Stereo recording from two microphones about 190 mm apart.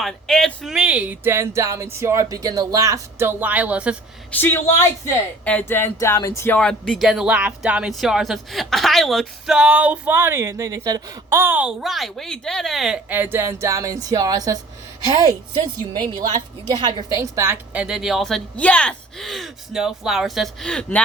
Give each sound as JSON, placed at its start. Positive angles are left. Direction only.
{"t": 0.0, "sound": "speech", "side_deg": 5}
{"t": 4.3, "sound": "speech", "side_deg": 10}